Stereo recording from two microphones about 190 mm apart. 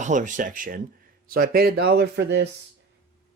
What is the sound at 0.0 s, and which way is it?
Speech, 40° right (ahead or behind).